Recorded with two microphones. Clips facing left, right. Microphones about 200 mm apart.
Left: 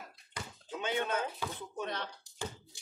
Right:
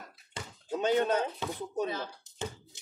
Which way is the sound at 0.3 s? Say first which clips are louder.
Right 1 dB; 25° right (ahead or behind).